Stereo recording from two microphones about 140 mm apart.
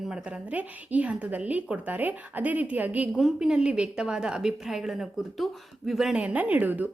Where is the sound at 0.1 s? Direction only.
10° right (ahead or behind).